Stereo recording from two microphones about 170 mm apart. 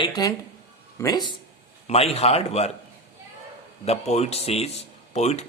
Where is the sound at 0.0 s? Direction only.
20° left (ahead or behind).